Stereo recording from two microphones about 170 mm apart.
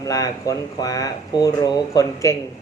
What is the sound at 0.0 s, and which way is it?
Speech, 20° left (ahead or behind).